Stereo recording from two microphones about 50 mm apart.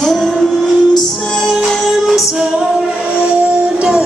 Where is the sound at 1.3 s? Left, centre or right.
Centre.